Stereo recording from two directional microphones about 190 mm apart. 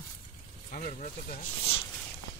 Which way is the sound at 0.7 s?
40° left (ahead or behind).